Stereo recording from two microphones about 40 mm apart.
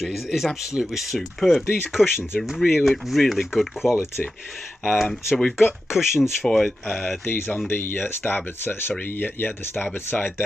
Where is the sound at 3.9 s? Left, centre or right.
Left.